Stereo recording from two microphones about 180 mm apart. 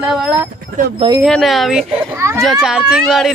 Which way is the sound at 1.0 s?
25° right (ahead or behind).